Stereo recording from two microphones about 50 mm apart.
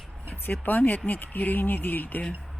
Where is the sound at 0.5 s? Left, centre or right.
Left.